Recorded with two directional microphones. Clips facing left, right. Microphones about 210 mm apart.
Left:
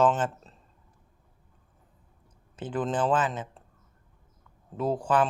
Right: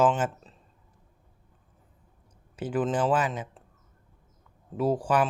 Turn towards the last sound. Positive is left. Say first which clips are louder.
# right 1 dB
turn(degrees=-10)  # may be behind; listen again after turning